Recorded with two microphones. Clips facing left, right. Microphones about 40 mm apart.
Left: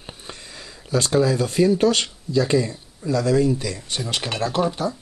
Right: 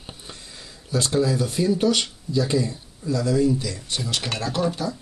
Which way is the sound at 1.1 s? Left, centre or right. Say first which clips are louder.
Left 3 dB; left.